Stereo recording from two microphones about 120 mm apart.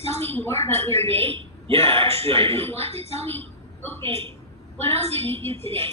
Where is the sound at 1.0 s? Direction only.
55° right (ahead or behind).